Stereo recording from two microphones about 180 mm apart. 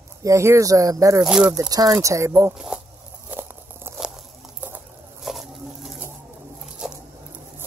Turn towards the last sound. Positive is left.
turn(degrees=0)  # may be behind; listen again after turning